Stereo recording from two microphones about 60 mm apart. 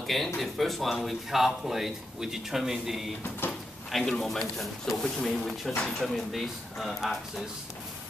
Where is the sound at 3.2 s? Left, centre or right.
Left.